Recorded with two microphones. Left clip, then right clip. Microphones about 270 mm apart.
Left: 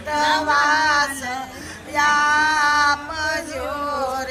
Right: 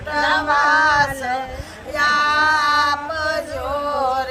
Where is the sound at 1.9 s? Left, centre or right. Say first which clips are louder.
Even; centre.